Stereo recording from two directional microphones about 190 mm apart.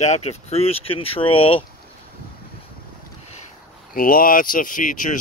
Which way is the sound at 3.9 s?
50° left (ahead or behind).